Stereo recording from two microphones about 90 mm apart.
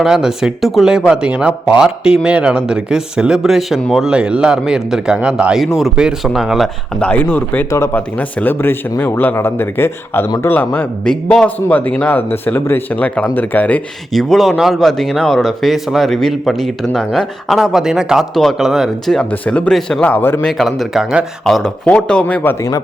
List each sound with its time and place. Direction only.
0.0 s speech: 5° right (ahead or behind)
5.5 s a man's voice: centre (ahead or behind)
7.1 s a man's voice: 20° left (ahead or behind)
11.0 s a man's voice: 10° left (ahead or behind)
14.1 s a man's voice: 5° left (ahead or behind)
19.2 s a man's voice: 15° left (ahead or behind)
20.4 s a man's voice: centre (ahead or behind)
21.4 s a man's voice: 5° left (ahead or behind)